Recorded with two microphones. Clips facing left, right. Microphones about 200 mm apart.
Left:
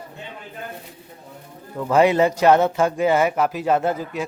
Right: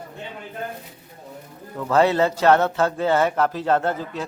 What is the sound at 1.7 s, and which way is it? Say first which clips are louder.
A man's voice: left 2 dB; 15° left (ahead or behind).